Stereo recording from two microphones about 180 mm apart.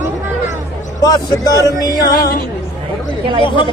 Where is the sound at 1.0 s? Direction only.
20° left (ahead or behind).